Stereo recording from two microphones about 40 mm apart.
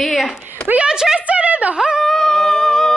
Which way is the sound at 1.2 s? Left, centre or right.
Right.